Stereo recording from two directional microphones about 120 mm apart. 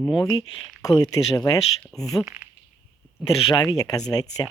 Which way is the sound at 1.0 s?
30° left (ahead or behind).